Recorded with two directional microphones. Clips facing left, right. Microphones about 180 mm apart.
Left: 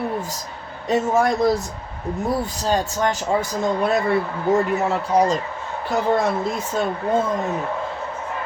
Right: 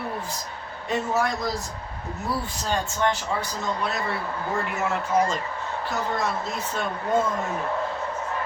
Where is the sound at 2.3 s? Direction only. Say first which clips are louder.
Left 6 dB; 40° left (ahead or behind).